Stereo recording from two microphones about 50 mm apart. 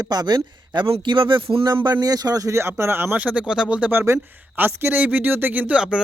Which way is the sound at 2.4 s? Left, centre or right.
Right.